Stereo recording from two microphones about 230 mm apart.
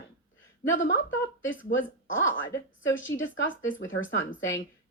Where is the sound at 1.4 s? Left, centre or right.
Left.